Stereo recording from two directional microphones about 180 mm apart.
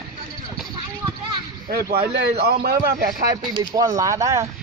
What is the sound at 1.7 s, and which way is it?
A man's voice, 60° right (ahead or behind).